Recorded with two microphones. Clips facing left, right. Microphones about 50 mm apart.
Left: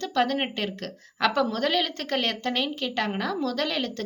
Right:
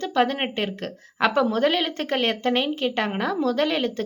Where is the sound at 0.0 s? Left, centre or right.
Centre.